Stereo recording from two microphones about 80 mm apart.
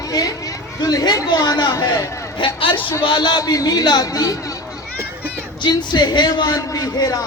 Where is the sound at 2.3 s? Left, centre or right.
Left.